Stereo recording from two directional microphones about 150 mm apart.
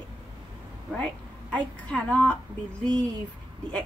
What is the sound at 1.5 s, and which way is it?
A woman's voice, 10° left (ahead or behind).